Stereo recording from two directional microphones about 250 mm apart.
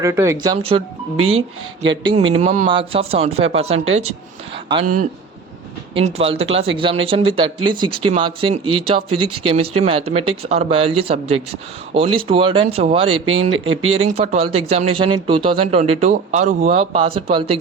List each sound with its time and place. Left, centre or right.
0.0 s speech: centre
1.2 s speech: right
1.9 s speech: centre
3.8 s speech: right
6.1 s speech: right
9.0 s speech: right
9.8 s speech: right
13.1 s speech: right
14.2 s speech: right
16.7 s speech: right